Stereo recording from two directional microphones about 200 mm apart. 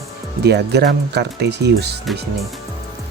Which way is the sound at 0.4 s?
55° right (ahead or behind).